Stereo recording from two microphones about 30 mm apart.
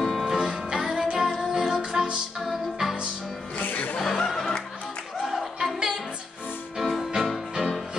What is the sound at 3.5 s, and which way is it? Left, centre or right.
Music, left.